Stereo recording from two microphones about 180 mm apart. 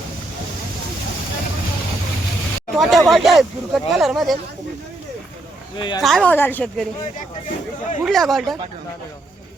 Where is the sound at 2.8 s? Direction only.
Centre (ahead or behind).